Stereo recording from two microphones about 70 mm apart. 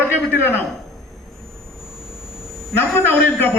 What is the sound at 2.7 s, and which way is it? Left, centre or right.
Speech, left.